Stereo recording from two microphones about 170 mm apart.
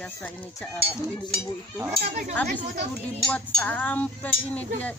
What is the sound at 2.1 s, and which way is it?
Speech, 40° right (ahead or behind).